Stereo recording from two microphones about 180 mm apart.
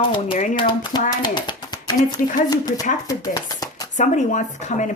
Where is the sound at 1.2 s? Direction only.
25° left (ahead or behind).